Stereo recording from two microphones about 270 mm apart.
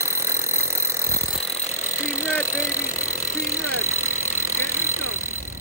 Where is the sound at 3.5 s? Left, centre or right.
Right.